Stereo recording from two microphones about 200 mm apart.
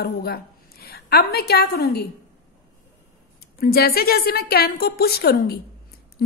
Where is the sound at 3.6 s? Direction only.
50° left (ahead or behind).